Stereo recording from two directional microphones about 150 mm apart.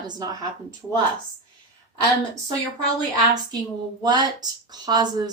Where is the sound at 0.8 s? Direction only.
10° right (ahead or behind).